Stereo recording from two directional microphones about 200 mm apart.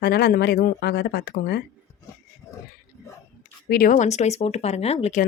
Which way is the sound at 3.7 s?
45° left (ahead or behind).